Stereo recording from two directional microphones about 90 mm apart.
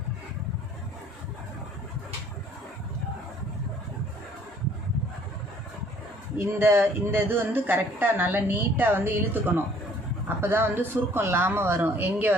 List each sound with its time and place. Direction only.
6.4 s speech: 25° right (ahead or behind)